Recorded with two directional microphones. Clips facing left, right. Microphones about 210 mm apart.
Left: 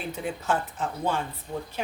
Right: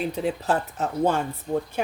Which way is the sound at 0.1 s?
35° right (ahead or behind).